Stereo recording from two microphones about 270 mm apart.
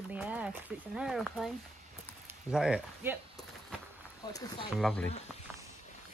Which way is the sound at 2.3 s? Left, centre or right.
Centre.